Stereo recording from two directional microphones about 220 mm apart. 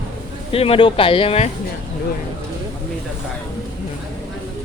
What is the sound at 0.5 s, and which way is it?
Speech, 25° left (ahead or behind).